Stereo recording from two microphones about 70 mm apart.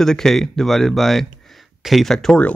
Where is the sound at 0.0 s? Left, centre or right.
Centre.